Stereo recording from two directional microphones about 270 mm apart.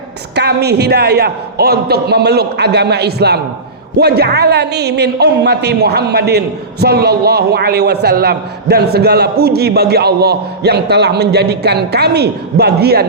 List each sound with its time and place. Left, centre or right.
0.3 s a man's voice: right